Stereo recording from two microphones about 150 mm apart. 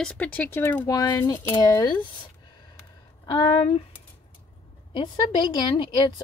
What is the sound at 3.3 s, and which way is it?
Speech, 35° left (ahead or behind).